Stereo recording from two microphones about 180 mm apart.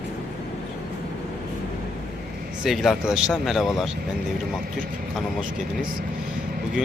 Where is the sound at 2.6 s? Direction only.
Centre (ahead or behind).